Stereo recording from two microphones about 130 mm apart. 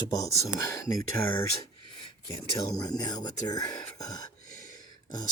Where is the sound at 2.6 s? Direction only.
30° left (ahead or behind).